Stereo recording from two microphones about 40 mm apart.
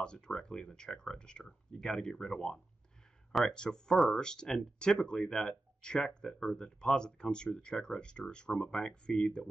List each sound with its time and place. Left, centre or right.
0.0 s speech: left